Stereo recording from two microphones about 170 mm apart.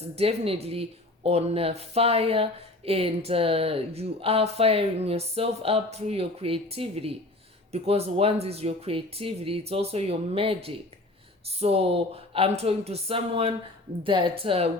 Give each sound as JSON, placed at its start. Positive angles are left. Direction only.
{"t": 0.2, "sound": "speech", "side_deg": -35}